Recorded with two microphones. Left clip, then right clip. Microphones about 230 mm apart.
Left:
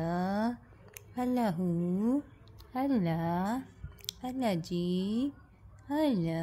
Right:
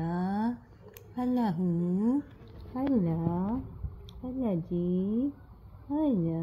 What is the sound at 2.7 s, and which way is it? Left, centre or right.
Speech, left.